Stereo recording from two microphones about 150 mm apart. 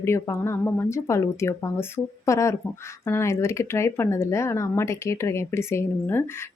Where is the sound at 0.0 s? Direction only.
15° left (ahead or behind).